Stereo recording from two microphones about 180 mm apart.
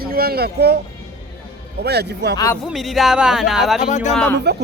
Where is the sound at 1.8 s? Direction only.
65° right (ahead or behind).